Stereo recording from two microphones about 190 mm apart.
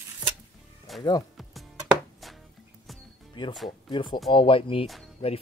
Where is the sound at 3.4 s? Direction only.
25° left (ahead or behind).